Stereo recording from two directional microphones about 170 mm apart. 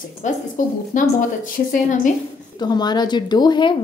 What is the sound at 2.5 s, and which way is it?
Speech, 25° left (ahead or behind).